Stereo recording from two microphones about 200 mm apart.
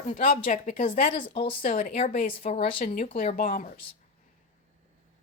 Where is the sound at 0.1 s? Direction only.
40° left (ahead or behind).